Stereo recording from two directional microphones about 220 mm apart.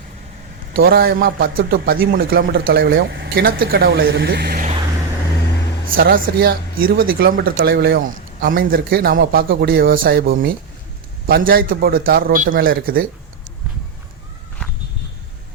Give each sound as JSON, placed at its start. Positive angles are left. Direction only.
{"t": 0.8, "sound": "speech", "side_deg": -45}
{"t": 5.9, "sound": "speech", "side_deg": -40}